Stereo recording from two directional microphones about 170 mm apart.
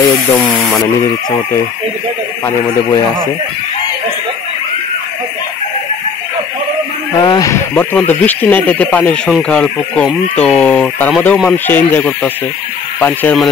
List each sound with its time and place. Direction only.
0.0 s speech: 15° left (ahead or behind)
2.4 s speech: 15° left (ahead or behind)
7.2 s speech: 20° left (ahead or behind)